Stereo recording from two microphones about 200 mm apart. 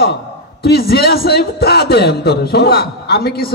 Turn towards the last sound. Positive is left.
turn(degrees=50)  # may be behind; listen again after turning